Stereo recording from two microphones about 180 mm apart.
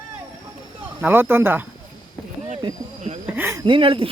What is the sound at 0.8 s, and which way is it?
Speech, 10° right (ahead or behind).